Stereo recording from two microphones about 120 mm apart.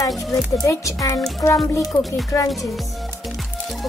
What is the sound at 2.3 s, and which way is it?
Speech, 20° left (ahead or behind).